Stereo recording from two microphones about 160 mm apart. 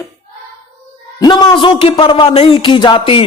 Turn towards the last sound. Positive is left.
turn(degrees=30)  # may be behind; listen again after turning